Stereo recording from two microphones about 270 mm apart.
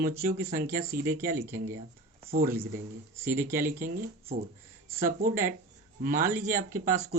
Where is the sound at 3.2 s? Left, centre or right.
Centre.